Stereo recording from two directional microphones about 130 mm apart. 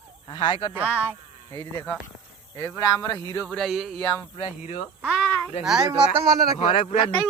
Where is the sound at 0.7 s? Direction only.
10° right (ahead or behind).